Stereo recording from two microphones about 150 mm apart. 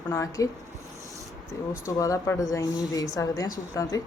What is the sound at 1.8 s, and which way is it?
Speech, 20° left (ahead or behind).